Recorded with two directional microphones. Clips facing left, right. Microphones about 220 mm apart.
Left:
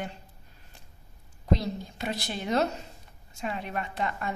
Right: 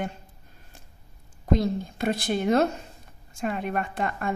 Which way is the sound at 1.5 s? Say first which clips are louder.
Right 5 dB; 50° right (ahead or behind).